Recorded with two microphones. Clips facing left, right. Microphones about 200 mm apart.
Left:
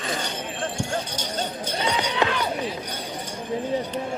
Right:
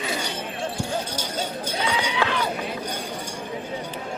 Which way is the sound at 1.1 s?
10° right (ahead or behind).